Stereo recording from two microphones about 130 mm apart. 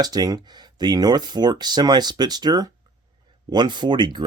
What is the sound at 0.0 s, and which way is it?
Speech, 30° right (ahead or behind).